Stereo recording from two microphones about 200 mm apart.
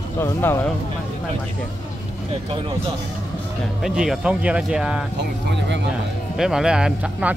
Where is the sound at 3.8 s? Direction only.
5° right (ahead or behind).